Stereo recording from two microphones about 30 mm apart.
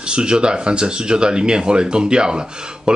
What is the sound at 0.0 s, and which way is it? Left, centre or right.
Speech, right.